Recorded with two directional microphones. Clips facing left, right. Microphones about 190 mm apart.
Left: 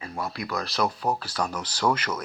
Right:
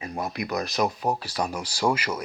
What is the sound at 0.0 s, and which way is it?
Speech, 20° right (ahead or behind).